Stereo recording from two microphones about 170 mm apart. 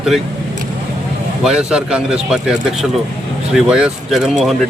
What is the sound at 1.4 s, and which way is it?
A man's voice, 5° right (ahead or behind).